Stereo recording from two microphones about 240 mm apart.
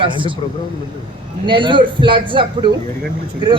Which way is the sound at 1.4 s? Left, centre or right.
Centre.